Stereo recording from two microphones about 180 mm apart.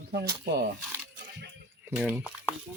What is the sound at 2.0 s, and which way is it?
Speech, 10° right (ahead or behind).